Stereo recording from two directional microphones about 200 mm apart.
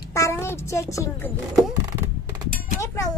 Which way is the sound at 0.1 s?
15° left (ahead or behind).